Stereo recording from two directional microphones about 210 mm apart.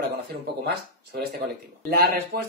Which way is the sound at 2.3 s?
50° right (ahead or behind).